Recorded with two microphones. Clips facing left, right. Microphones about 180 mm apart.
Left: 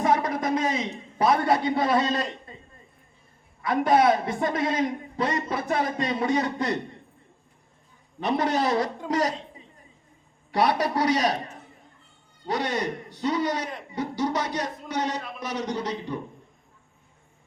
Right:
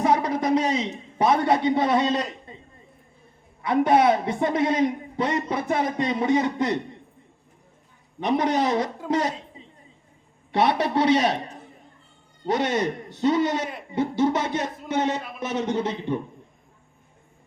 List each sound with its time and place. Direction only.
0.0 s a sound: 25° right (ahead or behind)
3.6 s a man's voice: 25° right (ahead or behind)
8.2 s a man's voice: 15° right (ahead or behind)
12.5 s a man's voice: 20° right (ahead or behind)